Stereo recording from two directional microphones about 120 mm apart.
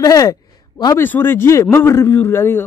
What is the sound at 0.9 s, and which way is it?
Speech, 20° left (ahead or behind).